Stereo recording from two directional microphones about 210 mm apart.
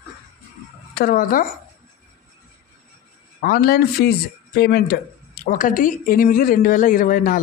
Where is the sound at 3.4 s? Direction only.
45° left (ahead or behind).